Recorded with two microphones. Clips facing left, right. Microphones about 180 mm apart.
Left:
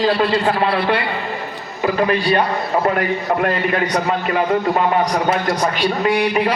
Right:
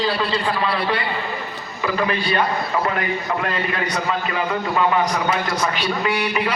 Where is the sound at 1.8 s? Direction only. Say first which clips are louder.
Left 5 dB; 40° left (ahead or behind).